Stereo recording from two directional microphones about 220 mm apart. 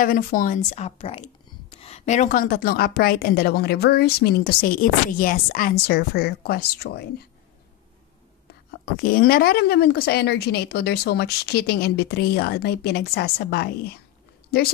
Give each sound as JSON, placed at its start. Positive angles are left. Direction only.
{"t": 0.0, "sound": "a woman's voice", "side_deg": 40}
{"t": 8.8, "sound": "a woman's voice", "side_deg": 40}